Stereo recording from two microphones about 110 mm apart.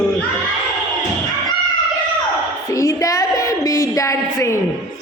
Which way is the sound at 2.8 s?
30° left (ahead or behind).